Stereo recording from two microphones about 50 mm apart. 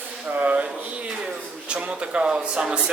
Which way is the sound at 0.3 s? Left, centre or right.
Right.